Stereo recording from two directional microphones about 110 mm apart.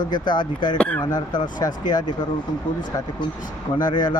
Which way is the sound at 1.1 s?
40° left (ahead or behind).